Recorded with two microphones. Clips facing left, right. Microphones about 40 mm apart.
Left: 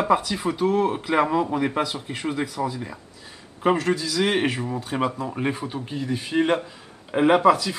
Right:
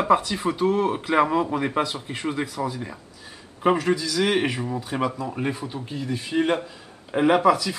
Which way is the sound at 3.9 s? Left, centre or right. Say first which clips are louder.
Even; centre.